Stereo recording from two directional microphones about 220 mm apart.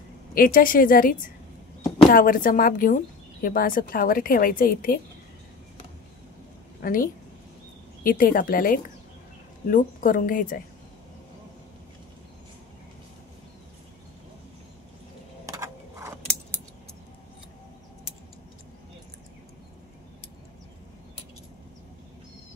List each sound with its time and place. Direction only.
0.3 s a woman's voice: 40° left (ahead or behind)
6.8 s a woman's voice: 40° left (ahead or behind)
15.4 s a sound: 15° right (ahead or behind)